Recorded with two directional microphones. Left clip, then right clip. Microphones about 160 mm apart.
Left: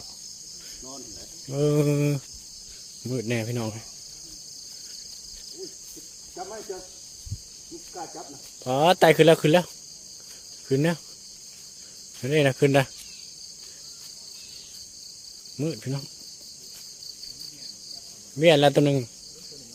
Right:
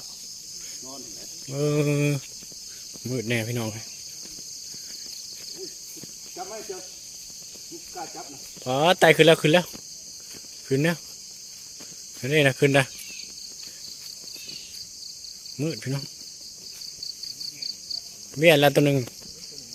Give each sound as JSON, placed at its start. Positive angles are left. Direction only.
{"t": 1.5, "sound": "a sound", "side_deg": 20}
{"t": 1.9, "sound": "speech", "side_deg": 0}
{"t": 6.3, "sound": "speech", "side_deg": -5}
{"t": 8.6, "sound": "speech", "side_deg": 10}
{"t": 10.7, "sound": "speech", "side_deg": 5}
{"t": 12.2, "sound": "speech", "side_deg": 5}
{"t": 15.5, "sound": "speech", "side_deg": 5}
{"t": 18.3, "sound": "speech", "side_deg": 5}